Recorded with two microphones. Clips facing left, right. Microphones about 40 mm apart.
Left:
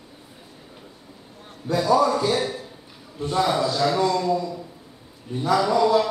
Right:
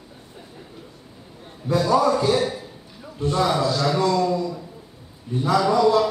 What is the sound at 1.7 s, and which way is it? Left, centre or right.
A man's voice, centre.